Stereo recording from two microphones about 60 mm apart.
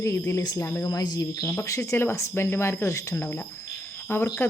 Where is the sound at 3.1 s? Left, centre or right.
Left.